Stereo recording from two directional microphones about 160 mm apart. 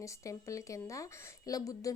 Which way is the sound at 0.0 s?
20° left (ahead or behind).